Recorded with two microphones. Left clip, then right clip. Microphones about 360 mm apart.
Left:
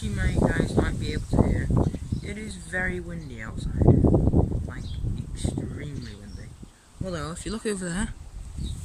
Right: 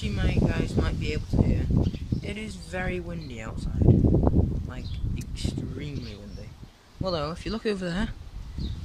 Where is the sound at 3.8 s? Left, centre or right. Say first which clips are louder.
Left 2 dB; left.